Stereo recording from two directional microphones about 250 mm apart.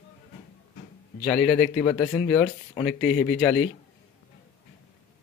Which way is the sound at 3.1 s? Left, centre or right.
Left.